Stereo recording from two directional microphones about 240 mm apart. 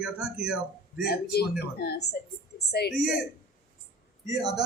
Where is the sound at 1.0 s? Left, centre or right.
Left.